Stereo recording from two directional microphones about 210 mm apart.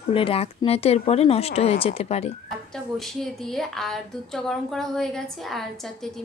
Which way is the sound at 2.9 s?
Centre (ahead or behind).